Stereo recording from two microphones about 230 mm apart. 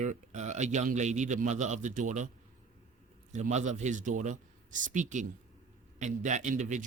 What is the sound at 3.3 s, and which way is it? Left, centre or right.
A man's voice, right.